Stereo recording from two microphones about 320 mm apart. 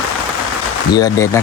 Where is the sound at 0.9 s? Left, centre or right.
Centre.